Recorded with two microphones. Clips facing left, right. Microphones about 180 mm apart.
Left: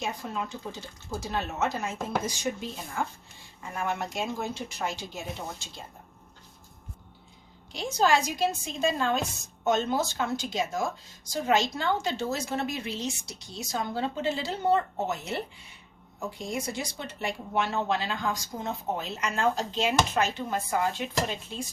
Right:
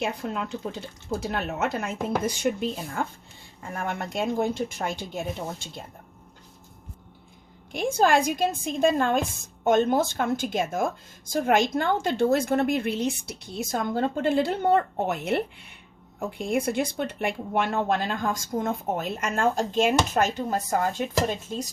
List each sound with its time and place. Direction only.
0.0 s speech: 65° right (ahead or behind)
7.7 s a woman's voice: 55° right (ahead or behind)